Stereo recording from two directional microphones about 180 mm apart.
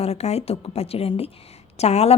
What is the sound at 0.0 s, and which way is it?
A woman's voice, 35° left (ahead or behind).